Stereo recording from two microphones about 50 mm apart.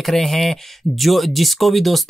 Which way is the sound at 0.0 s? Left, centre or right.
Centre.